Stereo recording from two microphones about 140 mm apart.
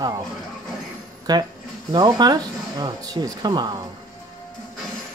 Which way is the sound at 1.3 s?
30° right (ahead or behind).